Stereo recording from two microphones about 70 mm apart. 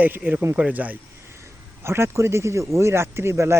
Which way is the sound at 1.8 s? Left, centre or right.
Right.